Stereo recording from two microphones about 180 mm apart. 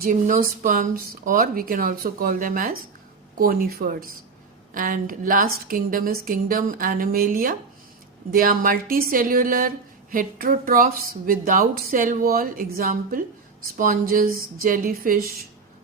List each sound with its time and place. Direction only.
0.0 s a woman's voice: 50° right (ahead or behind)